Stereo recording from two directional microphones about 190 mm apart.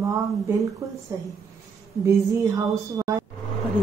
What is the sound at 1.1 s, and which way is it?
A woman's voice, 15° right (ahead or behind).